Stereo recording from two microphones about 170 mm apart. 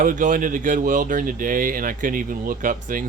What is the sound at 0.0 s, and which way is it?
Speech, 50° right (ahead or behind).